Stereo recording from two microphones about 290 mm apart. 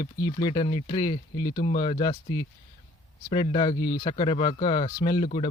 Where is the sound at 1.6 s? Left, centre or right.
Left.